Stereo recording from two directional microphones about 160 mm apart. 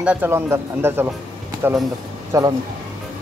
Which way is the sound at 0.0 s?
10° right (ahead or behind).